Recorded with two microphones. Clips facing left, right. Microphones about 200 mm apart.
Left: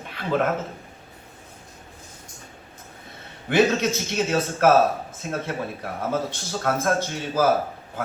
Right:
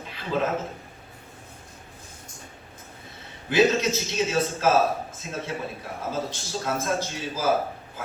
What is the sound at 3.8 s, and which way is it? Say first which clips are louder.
Speech: left 1 dB; 60° left (ahead or behind).